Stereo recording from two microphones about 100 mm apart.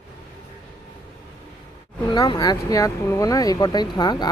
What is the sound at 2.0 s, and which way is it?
Speech, 45° left (ahead or behind).